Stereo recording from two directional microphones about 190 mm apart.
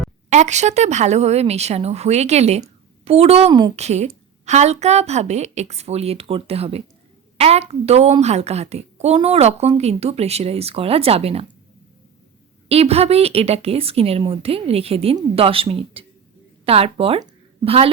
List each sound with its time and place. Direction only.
0.3 s a woman's voice: 35° right (ahead or behind)
12.6 s a woman's voice: 30° right (ahead or behind)